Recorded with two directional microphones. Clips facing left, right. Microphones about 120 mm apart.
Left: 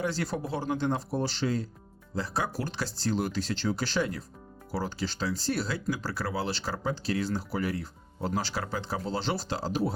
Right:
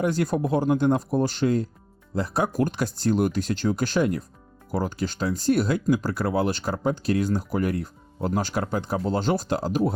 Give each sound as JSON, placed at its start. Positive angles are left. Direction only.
{"t": 0.0, "sound": "speech", "side_deg": -50}